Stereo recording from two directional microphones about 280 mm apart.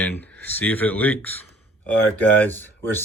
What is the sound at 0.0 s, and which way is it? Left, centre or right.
Speech, centre.